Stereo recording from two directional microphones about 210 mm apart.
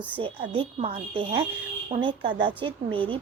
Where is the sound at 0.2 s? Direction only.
25° right (ahead or behind).